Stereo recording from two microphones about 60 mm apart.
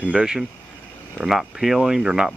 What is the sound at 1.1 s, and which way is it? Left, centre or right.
Speech, centre.